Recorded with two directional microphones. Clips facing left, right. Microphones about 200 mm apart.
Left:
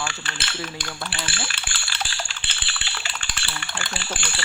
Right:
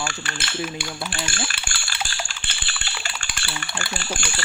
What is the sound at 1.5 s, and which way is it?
Coin, 45° right (ahead or behind).